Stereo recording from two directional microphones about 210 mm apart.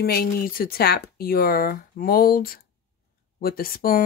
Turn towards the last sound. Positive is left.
turn(degrees=45)  # may be behind; listen again after turning